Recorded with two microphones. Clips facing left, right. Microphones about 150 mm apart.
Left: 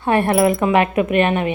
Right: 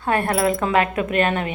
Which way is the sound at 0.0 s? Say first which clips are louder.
Left 4 dB; 25° left (ahead or behind).